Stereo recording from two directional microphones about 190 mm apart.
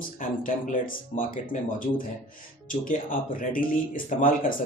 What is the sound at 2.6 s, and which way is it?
Speech, 45° left (ahead or behind).